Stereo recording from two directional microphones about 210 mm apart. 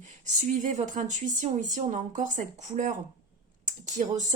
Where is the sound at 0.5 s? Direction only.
35° right (ahead or behind).